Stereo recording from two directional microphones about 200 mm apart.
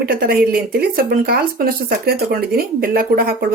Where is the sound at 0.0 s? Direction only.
50° right (ahead or behind).